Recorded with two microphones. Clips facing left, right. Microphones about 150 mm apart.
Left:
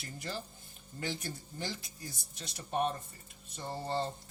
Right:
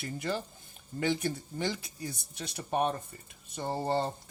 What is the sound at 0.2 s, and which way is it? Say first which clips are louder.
Speech: right 6 dB; 65° right (ahead or behind).